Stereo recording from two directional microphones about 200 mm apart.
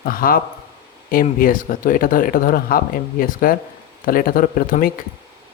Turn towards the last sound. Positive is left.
turn(degrees=45)  # may be behind; listen again after turning